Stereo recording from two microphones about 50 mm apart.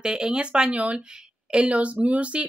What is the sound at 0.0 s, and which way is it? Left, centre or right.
A woman's voice, centre.